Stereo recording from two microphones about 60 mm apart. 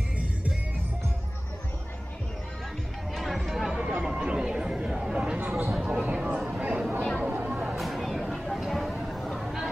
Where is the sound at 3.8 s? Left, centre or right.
Centre.